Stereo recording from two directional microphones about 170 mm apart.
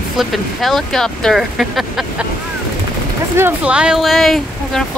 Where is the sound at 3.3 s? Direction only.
10° right (ahead or behind).